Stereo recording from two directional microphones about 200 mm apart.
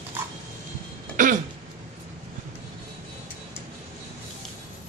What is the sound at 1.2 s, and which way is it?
Throat clearing, 40° right (ahead or behind).